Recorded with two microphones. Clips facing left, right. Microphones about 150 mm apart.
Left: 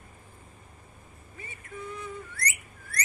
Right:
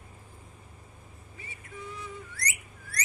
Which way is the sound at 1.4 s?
50° left (ahead or behind).